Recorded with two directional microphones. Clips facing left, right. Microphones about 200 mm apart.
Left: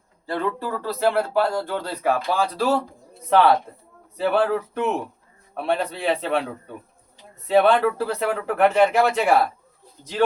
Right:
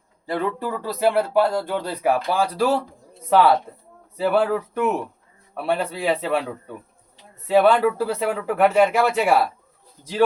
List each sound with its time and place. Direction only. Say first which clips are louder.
0.3 s speech: right 1 dB; 15° right (ahead or behind)
7.4 s speech: right 1 dB; 10° right (ahead or behind)